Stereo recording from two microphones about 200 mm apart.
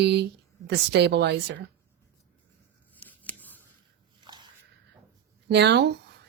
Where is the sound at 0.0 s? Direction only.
55° right (ahead or behind).